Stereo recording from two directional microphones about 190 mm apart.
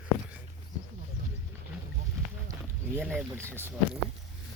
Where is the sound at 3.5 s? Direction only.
10° right (ahead or behind).